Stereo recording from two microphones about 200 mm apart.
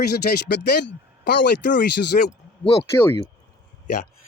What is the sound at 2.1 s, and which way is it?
Speech, 40° left (ahead or behind).